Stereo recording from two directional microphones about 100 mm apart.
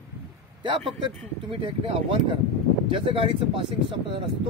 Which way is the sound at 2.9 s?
60° right (ahead or behind).